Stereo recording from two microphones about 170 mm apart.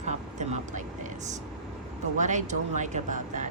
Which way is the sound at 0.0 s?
45° right (ahead or behind).